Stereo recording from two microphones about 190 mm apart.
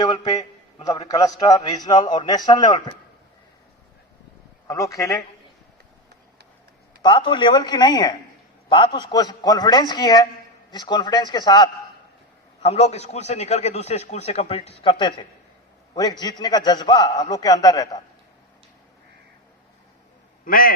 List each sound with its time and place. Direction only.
0.0 s a sound: 20° left (ahead or behind)
0.9 s a man's voice: 20° left (ahead or behind)
4.7 s a man's voice: 15° left (ahead or behind)
7.0 s a man's voice: 25° left (ahead or behind)
12.6 s a man's voice: 35° left (ahead or behind)
20.4 s a man's voice: 50° left (ahead or behind)